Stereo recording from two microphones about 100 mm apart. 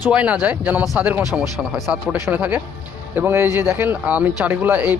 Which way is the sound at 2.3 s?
15° right (ahead or behind).